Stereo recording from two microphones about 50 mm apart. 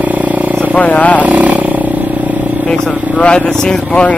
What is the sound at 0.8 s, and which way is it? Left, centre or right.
Speech, left.